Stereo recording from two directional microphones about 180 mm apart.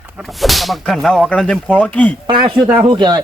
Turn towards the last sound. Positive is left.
turn(degrees=-25)  # may be behind; listen again after turning